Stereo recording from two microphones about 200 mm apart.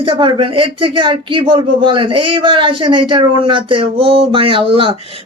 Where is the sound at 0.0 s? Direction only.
25° right (ahead or behind).